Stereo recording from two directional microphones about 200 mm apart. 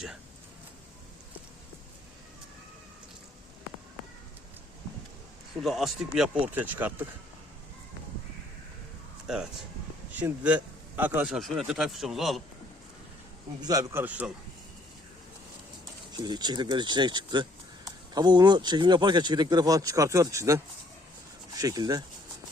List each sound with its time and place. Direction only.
5.6 s a man's voice: centre (ahead or behind)
9.2 s a man's voice: 5° right (ahead or behind)
13.6 s a man's voice: 20° right (ahead or behind)
16.1 s speech: 20° right (ahead or behind)